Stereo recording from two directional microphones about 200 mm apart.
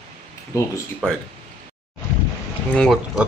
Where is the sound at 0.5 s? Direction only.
15° left (ahead or behind).